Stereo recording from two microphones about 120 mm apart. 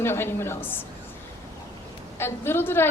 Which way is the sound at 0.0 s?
20° left (ahead or behind).